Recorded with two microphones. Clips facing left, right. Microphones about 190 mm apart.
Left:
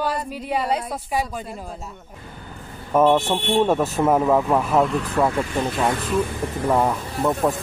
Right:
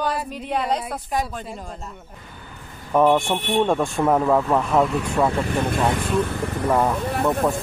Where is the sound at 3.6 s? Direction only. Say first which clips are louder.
Even; 5° left (ahead or behind).